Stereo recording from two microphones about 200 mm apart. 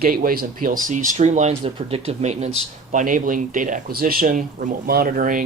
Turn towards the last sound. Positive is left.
turn(degrees=-45)  # may be behind; listen again after turning